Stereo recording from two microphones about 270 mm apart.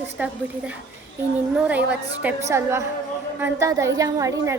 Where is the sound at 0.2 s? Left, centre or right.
Centre.